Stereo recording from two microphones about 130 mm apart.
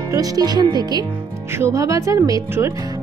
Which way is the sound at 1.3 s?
20° right (ahead or behind).